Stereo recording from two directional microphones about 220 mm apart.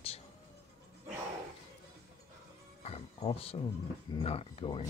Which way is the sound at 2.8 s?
30° left (ahead or behind).